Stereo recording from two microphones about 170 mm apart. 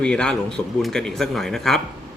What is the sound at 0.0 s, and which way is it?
Speech, 5° left (ahead or behind).